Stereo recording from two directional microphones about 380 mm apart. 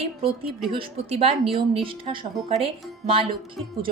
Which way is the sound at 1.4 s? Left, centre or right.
Centre.